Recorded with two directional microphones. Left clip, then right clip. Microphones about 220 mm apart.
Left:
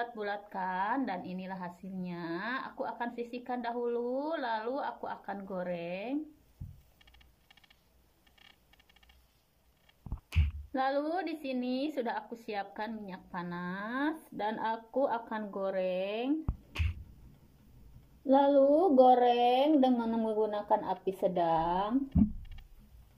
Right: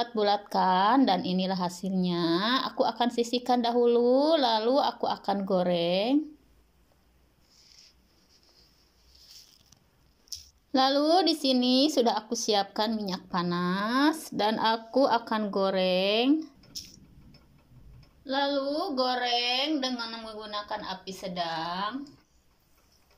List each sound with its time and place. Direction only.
0.0 s a woman's voice: 20° right (ahead or behind)
10.7 s a woman's voice: 20° right (ahead or behind)
18.3 s speech: 35° left (ahead or behind)
19.8 s a woman's voice: 5° left (ahead or behind)
20.2 s speech: 35° left (ahead or behind)